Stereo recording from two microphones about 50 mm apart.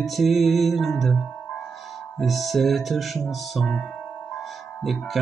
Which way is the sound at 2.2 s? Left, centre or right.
Centre.